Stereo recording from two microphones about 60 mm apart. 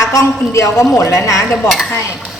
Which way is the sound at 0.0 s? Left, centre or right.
Left.